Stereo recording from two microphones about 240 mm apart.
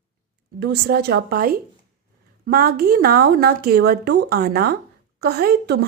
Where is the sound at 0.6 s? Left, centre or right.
Right.